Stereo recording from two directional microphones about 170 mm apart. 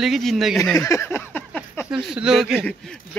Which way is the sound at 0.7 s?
20° left (ahead or behind).